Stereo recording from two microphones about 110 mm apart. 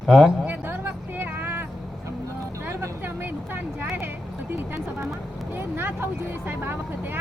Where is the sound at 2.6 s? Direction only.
25° right (ahead or behind).